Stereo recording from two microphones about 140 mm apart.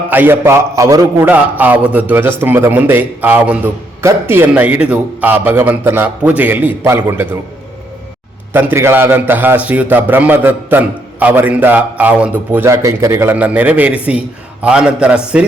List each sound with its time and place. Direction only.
0.1 s a man's voice: 15° right (ahead or behind)
1.3 s a man's voice: 10° right (ahead or behind)
8.5 s a man's voice: 15° right (ahead or behind)